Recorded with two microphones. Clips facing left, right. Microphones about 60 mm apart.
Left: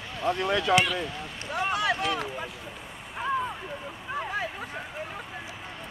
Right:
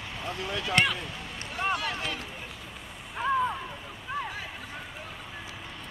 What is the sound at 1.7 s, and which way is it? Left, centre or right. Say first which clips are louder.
Speech: left 5 dB; left.